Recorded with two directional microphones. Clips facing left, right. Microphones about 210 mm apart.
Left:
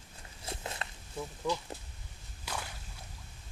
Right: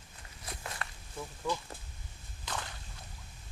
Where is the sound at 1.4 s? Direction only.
15° left (ahead or behind).